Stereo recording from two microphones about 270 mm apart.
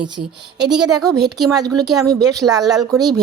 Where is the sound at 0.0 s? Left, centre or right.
Right.